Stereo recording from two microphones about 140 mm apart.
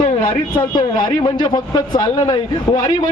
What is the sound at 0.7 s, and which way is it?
A man's voice, 35° left (ahead or behind).